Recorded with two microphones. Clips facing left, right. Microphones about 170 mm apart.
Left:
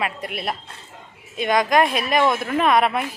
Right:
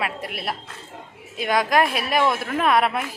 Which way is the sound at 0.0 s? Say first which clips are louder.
Left 2 dB; centre (ahead or behind).